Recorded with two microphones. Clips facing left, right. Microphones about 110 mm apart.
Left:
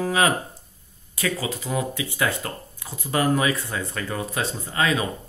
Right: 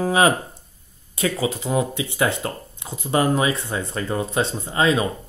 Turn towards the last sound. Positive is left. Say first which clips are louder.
# right 4 dB
turn(degrees=-25)  # may be behind; listen again after turning